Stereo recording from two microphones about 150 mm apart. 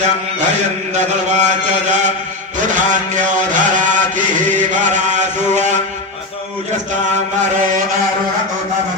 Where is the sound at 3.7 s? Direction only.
55° right (ahead or behind).